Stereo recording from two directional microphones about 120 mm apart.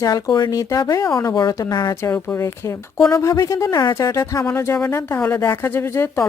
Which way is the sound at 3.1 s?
25° left (ahead or behind).